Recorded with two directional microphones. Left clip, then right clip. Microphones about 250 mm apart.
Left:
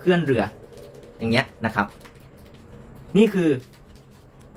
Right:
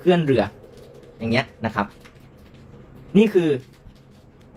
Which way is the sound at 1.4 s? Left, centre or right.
Centre.